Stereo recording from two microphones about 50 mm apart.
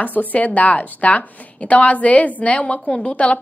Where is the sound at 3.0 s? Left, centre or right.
Left.